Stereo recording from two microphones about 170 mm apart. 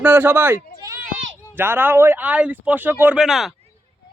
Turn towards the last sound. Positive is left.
turn(degrees=0)  # may be behind; listen again after turning